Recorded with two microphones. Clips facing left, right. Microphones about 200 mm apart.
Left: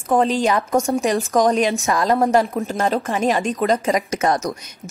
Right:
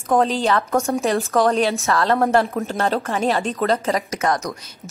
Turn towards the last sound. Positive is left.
turn(degrees=20)  # may be behind; listen again after turning